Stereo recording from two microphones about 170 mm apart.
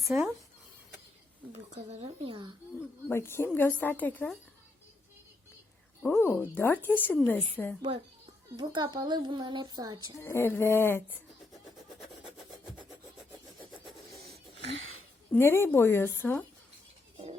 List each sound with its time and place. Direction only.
0.0 s speech: 5° right (ahead or behind)
1.7 s speech: 40° right (ahead or behind)
3.1 s a woman's voice: 15° left (ahead or behind)
6.0 s a woman's voice: 15° left (ahead or behind)
8.5 s a child's voice: 25° right (ahead or behind)
10.2 s a woman's voice: 15° left (ahead or behind)
13.8 s rub: centre (ahead or behind)
15.3 s a woman's voice: 15° left (ahead or behind)